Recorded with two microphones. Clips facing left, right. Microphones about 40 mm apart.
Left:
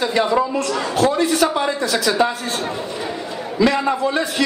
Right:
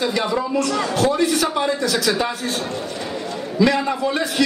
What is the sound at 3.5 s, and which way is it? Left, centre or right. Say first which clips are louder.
Speech: left 1 dB; centre.